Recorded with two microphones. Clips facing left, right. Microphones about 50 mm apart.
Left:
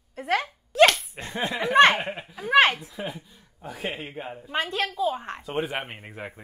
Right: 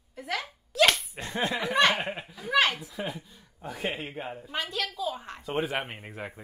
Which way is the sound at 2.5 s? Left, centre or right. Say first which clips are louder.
Left 6 dB; left.